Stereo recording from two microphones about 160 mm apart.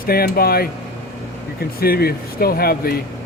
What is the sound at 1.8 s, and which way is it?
Speech, 75° left (ahead or behind).